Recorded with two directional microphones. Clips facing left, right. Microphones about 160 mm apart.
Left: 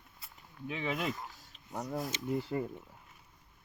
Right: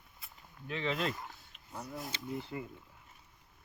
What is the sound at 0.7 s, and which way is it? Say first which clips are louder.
Speech: even; 10° left (ahead or behind).